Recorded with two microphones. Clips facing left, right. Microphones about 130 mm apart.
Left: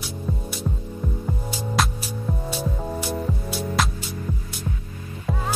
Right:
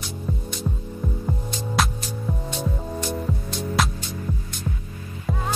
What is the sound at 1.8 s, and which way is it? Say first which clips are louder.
Music: even; centre (ahead or behind).